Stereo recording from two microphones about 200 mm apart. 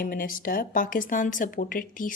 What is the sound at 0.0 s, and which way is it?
A woman's voice, 45° left (ahead or behind).